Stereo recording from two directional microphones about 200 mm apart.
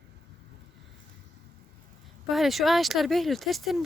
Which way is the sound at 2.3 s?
Centre (ahead or behind).